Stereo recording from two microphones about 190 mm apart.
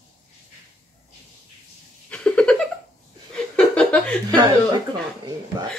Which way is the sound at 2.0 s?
5° left (ahead or behind).